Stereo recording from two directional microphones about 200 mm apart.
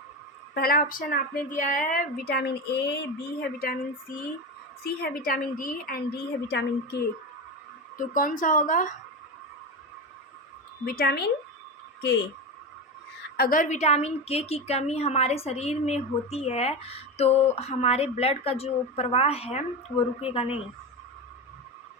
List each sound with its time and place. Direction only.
0.5 s speech: 50° left (ahead or behind)
7.9 s a woman's voice: 40° left (ahead or behind)
10.8 s speech: 50° left (ahead or behind)
13.3 s a woman's voice: 45° left (ahead or behind); by 20.6 s 30° left (ahead or behind)